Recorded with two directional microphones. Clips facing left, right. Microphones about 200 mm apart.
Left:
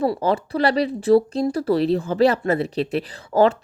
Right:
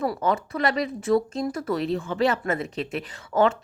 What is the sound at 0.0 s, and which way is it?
Speech, 30° left (ahead or behind).